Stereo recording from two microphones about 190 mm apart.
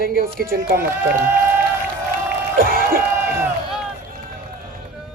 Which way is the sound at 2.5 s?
50° right (ahead or behind).